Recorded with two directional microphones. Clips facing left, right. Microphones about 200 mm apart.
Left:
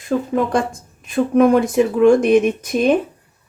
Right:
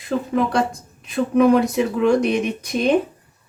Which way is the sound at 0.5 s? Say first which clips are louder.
Left 1 dB; 50° left (ahead or behind).